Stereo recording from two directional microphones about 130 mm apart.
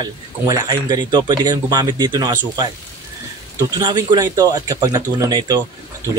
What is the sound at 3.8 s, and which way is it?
Speech, 35° right (ahead or behind).